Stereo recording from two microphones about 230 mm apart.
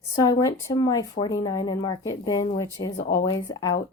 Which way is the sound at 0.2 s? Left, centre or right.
Centre.